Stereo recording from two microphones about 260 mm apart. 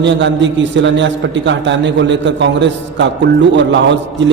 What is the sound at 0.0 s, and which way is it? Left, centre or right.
A man's voice, right.